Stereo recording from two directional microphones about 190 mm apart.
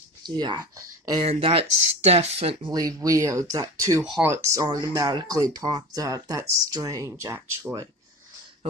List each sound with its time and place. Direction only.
0.2 s speech: 20° right (ahead or behind)
1.2 s speech: 30° right (ahead or behind)
4.0 s speech: 5° right (ahead or behind)
4.3 s speech: 15° right (ahead or behind)